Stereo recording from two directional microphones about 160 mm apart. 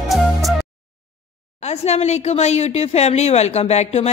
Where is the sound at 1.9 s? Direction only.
45° left (ahead or behind).